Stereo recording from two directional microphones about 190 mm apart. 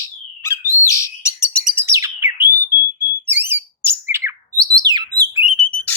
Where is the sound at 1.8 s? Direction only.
15° right (ahead or behind).